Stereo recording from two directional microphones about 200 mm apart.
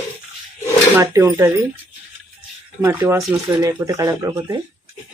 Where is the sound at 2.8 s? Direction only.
10° right (ahead or behind).